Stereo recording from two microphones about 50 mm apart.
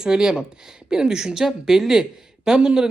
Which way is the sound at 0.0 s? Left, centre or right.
Centre.